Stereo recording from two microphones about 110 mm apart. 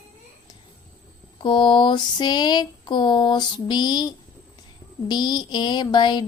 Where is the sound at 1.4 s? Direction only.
45° left (ahead or behind).